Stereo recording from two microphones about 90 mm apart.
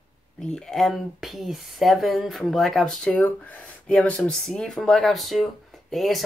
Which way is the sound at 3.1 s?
15° left (ahead or behind).